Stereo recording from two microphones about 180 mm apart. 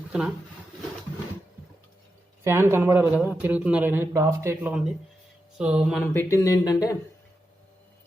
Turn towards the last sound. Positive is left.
turn(degrees=20)  # may be behind; listen again after turning